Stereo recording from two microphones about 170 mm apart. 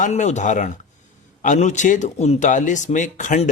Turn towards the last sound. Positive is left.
turn(degrees=45)  # may be behind; listen again after turning